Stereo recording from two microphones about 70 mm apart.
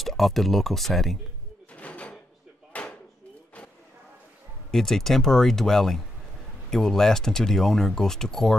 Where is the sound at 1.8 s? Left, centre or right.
Centre.